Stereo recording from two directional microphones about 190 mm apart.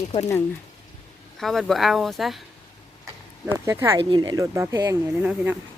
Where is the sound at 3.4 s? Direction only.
15° right (ahead or behind).